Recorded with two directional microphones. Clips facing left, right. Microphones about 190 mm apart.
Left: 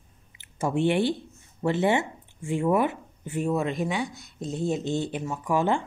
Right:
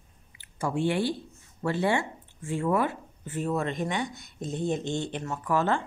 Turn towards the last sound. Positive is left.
turn(degrees=15)  # may be behind; listen again after turning